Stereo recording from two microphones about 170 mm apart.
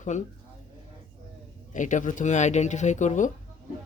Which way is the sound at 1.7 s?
50° left (ahead or behind).